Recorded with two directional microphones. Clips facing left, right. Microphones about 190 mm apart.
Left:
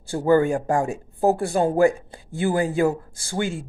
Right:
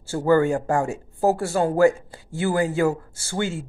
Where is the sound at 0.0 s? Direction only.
15° left (ahead or behind).